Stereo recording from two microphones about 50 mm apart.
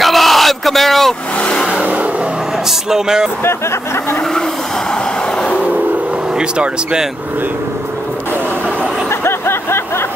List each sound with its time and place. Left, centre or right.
0.0 s bellow: centre
2.9 s speech: centre
3.4 s speech: left
6.3 s speech: centre
9.1 s a sound: left